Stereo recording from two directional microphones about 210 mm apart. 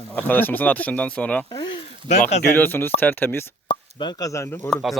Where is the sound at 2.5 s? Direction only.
10° left (ahead or behind).